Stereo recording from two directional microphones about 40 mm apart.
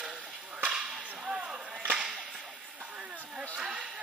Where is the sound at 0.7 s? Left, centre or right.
Right.